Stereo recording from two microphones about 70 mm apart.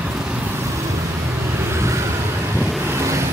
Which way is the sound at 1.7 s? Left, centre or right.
Right.